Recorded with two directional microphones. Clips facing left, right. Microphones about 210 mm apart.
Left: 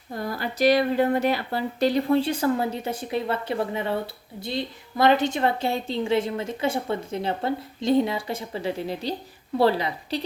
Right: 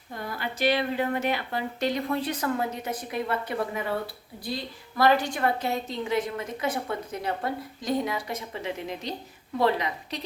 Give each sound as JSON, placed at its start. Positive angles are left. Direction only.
{"t": 0.1, "sound": "a woman's voice", "side_deg": 40}